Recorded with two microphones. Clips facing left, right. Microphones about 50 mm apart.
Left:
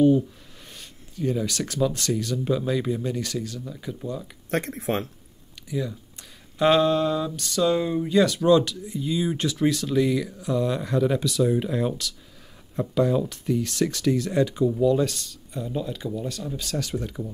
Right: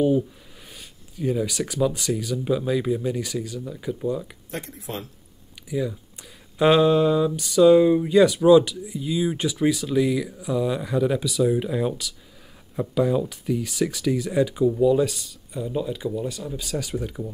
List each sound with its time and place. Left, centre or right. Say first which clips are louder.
0.7 s speech: left 1 dB; centre
4.5 s speech: left 11 dB; left
5.7 s speech: right 3 dB; centre